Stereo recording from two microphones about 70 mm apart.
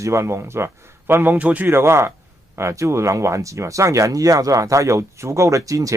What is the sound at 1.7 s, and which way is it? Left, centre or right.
Speech, right.